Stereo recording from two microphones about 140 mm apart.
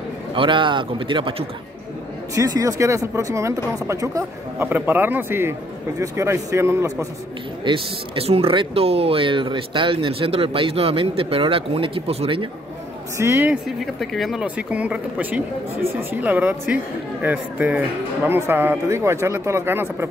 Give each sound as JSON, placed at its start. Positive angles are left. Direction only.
{"t": 0.3, "sound": "speech", "side_deg": -35}
{"t": 2.3, "sound": "speech", "side_deg": -25}
{"t": 4.6, "sound": "speech", "side_deg": -10}
{"t": 7.6, "sound": "speech", "side_deg": -40}
{"t": 13.2, "sound": "speech", "side_deg": -20}
{"t": 13.5, "sound": "speech", "side_deg": 0}